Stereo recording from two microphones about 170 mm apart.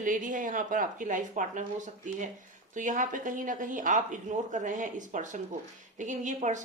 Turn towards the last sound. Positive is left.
turn(degrees=-45)  # may be behind; listen again after turning